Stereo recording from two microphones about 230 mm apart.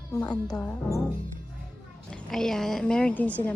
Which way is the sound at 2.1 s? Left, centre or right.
Centre.